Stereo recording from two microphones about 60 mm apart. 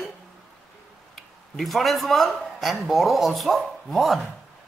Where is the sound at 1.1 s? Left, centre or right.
Centre.